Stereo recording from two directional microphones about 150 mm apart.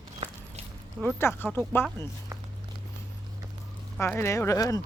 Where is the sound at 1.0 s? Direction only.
15° left (ahead or behind).